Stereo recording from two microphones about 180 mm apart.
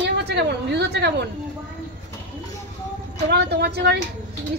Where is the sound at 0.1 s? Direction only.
70° right (ahead or behind).